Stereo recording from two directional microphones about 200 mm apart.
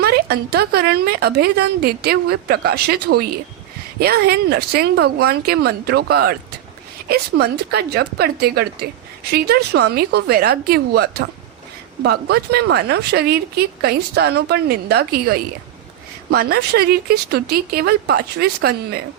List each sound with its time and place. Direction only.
0.0 s a woman's voice: 55° right (ahead or behind)
12.0 s a woman's voice: 55° right (ahead or behind)